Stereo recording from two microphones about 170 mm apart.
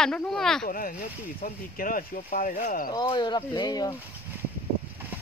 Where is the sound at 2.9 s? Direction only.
25° left (ahead or behind).